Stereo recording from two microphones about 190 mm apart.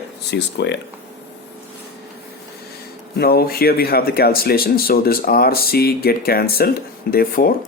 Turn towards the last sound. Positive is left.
turn(degrees=50)  # may be behind; listen again after turning